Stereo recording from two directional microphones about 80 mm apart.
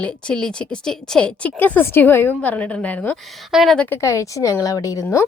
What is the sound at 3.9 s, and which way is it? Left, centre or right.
A woman's voice, left.